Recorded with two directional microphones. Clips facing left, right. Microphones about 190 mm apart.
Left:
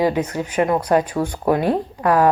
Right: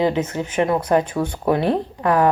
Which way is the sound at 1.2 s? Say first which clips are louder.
Left 1 dB; 25° left (ahead or behind).